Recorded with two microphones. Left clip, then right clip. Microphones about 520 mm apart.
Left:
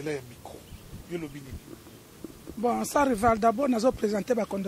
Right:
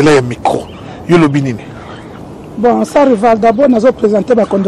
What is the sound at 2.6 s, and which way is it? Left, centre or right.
Speech, left.